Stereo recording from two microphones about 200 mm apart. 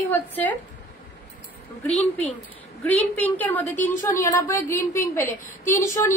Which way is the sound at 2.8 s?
10° left (ahead or behind).